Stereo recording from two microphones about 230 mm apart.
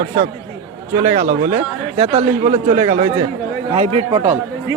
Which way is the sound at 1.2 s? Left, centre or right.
Right.